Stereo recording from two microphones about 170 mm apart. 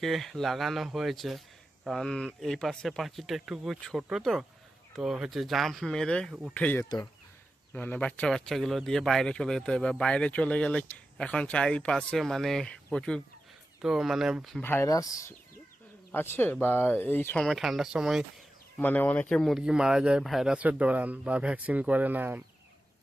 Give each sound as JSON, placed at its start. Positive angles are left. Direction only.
{"t": 0.0, "sound": "speech", "side_deg": 0}
{"t": 6.8, "sound": "speech", "side_deg": 25}
{"t": 7.7, "sound": "speech", "side_deg": 10}
{"t": 14.6, "sound": "speech", "side_deg": 15}
{"t": 18.8, "sound": "speech", "side_deg": 10}